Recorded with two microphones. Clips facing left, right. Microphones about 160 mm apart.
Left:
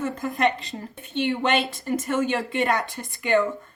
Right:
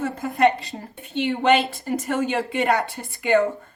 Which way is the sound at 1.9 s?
40° right (ahead or behind).